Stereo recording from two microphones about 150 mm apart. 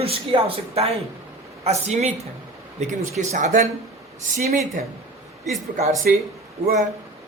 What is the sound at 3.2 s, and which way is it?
Speech, 50° right (ahead or behind).